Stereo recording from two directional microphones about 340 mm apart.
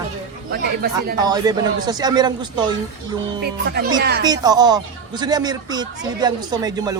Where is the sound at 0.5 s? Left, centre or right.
Right.